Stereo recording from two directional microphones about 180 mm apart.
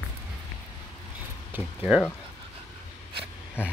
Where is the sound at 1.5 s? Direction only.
10° right (ahead or behind).